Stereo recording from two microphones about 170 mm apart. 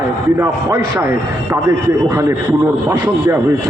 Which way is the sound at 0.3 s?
15° right (ahead or behind).